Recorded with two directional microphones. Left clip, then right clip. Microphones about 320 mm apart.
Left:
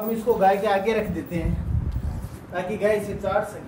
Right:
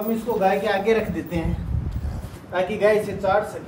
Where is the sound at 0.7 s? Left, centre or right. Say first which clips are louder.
Right 1 dB; centre.